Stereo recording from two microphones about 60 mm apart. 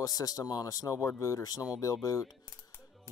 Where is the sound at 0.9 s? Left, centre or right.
Left.